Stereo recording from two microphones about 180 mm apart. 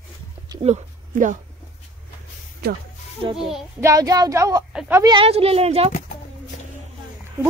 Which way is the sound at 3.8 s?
20° right (ahead or behind).